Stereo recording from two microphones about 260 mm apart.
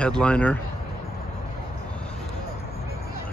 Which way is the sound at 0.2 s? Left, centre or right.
Centre.